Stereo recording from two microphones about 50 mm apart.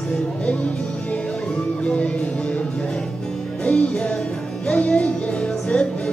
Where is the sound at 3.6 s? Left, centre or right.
Left.